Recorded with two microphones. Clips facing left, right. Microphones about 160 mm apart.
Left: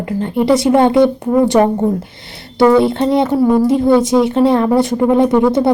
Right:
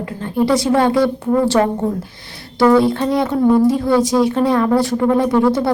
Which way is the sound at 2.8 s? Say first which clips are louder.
Left 3 dB; 25° left (ahead or behind).